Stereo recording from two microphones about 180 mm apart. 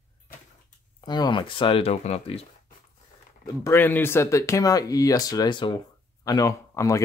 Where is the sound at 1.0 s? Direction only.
25° left (ahead or behind).